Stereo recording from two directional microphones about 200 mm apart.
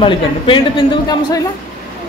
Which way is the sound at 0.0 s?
25° left (ahead or behind).